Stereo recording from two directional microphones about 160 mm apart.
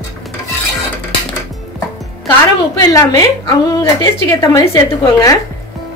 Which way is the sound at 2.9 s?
20° left (ahead or behind).